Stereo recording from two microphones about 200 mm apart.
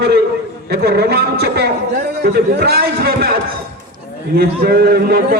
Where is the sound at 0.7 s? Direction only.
50° right (ahead or behind).